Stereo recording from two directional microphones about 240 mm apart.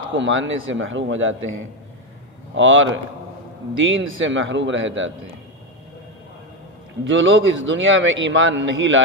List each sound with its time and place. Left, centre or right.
0.1 s a man's voice: right
2.6 s a man's voice: right
7.1 s a man's voice: right